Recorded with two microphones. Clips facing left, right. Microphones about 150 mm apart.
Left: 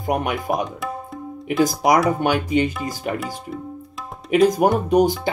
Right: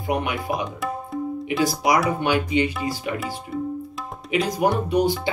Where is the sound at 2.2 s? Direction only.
45° left (ahead or behind).